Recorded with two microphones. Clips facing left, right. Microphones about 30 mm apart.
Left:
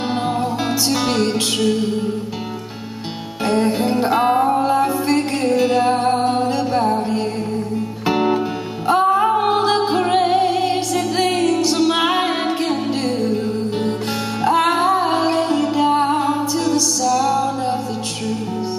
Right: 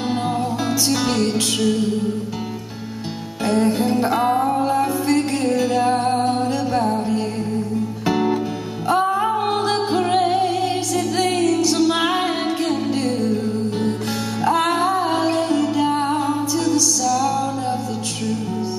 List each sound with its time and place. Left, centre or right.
0.1 s music: left
3.4 s music: left
8.1 s music: left
14.4 s music: centre